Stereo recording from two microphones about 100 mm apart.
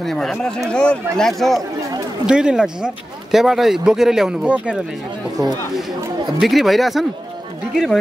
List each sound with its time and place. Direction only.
0.0 s speech: 5° left (ahead or behind)
2.2 s speech: 10° right (ahead or behind)
6.4 s speech: centre (ahead or behind)